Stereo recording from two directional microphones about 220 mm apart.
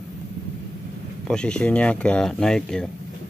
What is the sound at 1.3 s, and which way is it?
Speech, 5° left (ahead or behind).